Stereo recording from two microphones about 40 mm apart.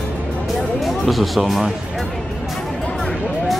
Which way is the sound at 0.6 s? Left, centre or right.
Centre.